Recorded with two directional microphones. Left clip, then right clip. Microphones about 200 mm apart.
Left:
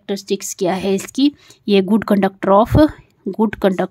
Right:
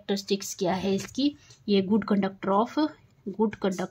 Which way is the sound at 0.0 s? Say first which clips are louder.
Left 7 dB; 30° left (ahead or behind).